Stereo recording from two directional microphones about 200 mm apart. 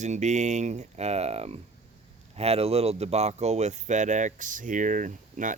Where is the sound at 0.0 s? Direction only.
35° right (ahead or behind).